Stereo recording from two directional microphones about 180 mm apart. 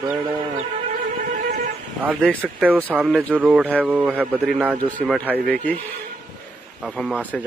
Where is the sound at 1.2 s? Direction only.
45° right (ahead or behind).